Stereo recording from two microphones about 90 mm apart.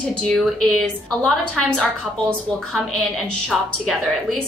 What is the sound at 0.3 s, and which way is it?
A woman's voice, 5° left (ahead or behind).